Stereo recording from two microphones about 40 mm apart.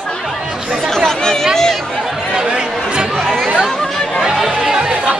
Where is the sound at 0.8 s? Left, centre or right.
Centre.